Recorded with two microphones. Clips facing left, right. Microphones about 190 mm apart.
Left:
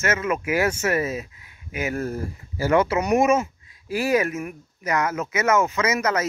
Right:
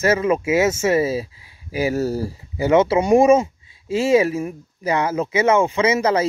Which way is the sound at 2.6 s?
25° right (ahead or behind).